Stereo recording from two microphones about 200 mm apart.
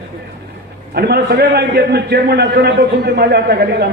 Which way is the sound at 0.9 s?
55° right (ahead or behind).